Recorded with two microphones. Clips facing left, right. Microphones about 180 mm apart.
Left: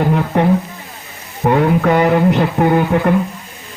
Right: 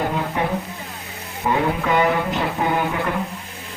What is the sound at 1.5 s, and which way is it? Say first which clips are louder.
Music: left 7 dB; 55° left (ahead or behind).